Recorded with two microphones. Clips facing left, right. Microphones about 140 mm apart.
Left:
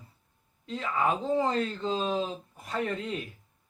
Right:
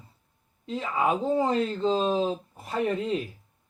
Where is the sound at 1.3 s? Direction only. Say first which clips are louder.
Right 3 dB; 25° right (ahead or behind).